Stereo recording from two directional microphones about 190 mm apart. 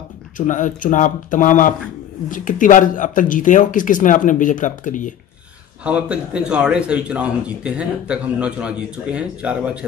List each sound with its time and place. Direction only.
0.4 s speech: 45° left (ahead or behind)
5.9 s a man's voice: 5° right (ahead or behind)